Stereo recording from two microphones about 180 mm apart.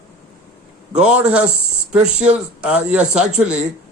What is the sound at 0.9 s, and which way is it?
Speech, 5° right (ahead or behind).